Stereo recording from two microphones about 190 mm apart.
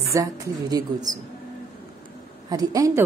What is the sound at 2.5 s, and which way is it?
Speech, 20° right (ahead or behind).